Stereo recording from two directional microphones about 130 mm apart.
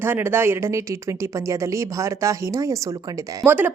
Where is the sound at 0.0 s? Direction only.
15° right (ahead or behind).